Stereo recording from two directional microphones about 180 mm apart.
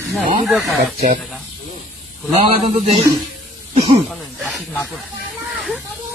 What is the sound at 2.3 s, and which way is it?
Speech, 40° right (ahead or behind).